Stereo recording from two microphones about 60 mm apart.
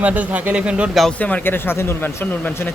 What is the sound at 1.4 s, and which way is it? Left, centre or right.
Speech, left.